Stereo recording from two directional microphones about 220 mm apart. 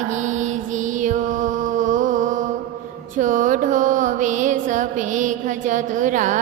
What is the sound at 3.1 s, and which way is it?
Mantra, 35° right (ahead or behind).